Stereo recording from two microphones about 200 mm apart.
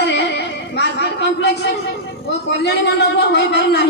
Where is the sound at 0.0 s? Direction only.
60° left (ahead or behind).